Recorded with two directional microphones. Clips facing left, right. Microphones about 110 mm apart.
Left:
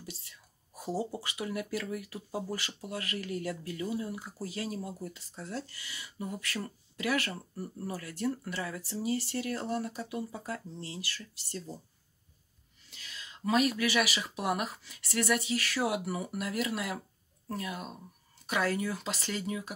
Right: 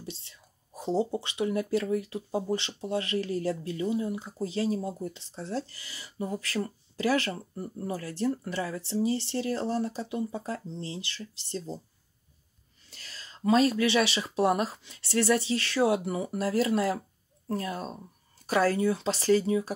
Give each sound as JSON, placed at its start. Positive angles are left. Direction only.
{"t": 0.0, "sound": "speech", "side_deg": -25}
{"t": 12.9, "sound": "speech", "side_deg": -35}